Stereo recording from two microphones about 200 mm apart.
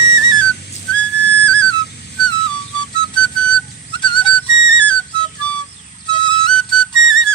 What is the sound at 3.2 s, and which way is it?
Whistle, 5° left (ahead or behind).